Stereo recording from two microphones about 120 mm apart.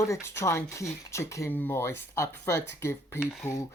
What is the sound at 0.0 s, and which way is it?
Speech, 25° left (ahead or behind).